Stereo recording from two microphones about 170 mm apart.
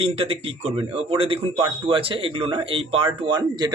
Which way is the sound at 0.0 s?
35° right (ahead or behind).